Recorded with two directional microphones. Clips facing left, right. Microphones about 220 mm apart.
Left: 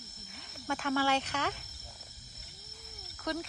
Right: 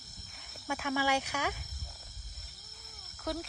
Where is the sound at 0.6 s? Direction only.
10° right (ahead or behind).